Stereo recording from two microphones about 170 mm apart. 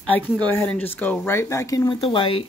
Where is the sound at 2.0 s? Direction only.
30° left (ahead or behind).